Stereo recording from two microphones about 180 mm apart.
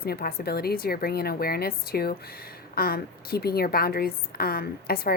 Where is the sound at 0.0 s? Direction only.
60° left (ahead or behind).